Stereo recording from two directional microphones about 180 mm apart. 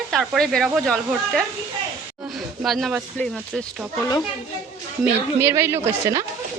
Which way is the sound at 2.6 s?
Centre (ahead or behind).